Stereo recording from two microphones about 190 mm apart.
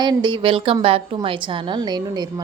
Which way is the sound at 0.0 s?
25° right (ahead or behind).